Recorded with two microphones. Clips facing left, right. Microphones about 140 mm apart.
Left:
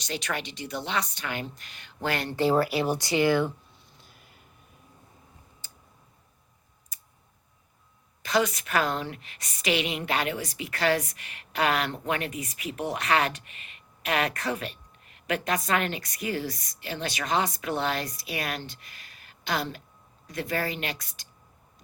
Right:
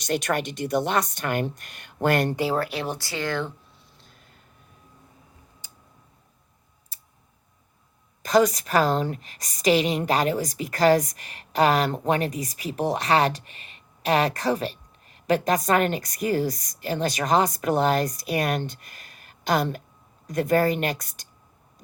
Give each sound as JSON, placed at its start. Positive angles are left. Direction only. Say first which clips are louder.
{"t": 0.0, "sound": "speech", "louder": "right 8 dB", "side_deg": -50}
{"t": 2.4, "sound": "speech", "louder": "left 2 dB", "side_deg": 0}
{"t": 3.0, "sound": "speech", "louder": "left 5 dB", "side_deg": 15}
{"t": 4.0, "sound": "a sound", "louder": "right 1 dB", "side_deg": 5}
{"t": 5.6, "sound": "tick", "louder": "right 1 dB", "side_deg": -15}
{"t": 6.9, "sound": "tick", "louder": "right 1 dB", "side_deg": -30}
{"t": 8.2, "sound": "a woman's voice", "louder": "right 6 dB", "side_deg": -40}